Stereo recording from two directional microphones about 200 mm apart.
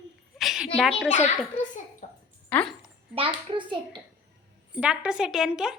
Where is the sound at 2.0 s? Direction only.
40° left (ahead or behind).